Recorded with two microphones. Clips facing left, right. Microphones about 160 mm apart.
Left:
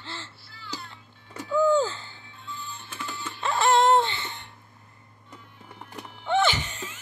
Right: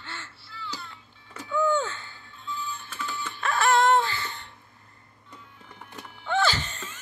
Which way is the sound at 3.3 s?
20° left (ahead or behind).